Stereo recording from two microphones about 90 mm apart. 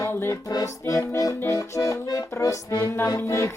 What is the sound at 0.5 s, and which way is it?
Music, 40° left (ahead or behind).